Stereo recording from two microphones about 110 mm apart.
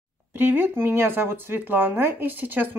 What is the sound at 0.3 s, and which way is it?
Speech, 15° right (ahead or behind).